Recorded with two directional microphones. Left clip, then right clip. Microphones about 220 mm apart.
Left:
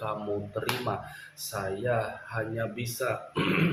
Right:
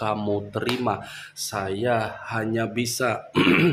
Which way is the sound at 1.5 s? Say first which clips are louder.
Right 5 dB; 45° right (ahead or behind).